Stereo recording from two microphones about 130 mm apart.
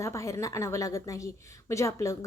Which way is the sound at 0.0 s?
25° left (ahead or behind).